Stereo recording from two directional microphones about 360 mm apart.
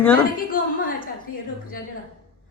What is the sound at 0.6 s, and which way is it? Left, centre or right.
Speech, left.